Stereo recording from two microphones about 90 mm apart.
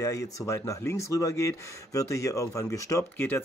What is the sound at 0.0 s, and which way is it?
Speech, 40° left (ahead or behind).